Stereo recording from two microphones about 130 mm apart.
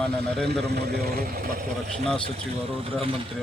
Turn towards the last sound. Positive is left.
turn(degrees=-45)  # may be behind; listen again after turning